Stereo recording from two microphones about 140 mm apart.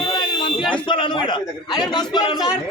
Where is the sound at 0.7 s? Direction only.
35° left (ahead or behind).